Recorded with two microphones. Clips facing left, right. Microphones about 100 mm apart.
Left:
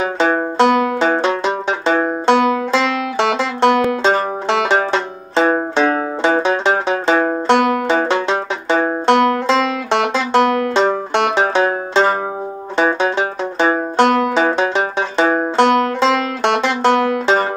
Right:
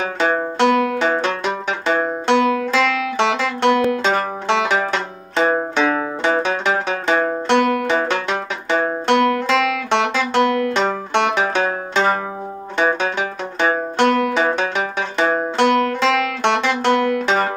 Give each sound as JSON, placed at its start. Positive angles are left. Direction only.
{"t": 0.2, "sound": "music", "side_deg": 30}
{"t": 7.2, "sound": "banjo", "side_deg": 30}
{"t": 12.7, "sound": "music", "side_deg": 30}